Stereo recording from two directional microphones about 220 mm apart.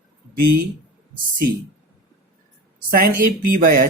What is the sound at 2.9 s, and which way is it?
Speech, 40° right (ahead or behind).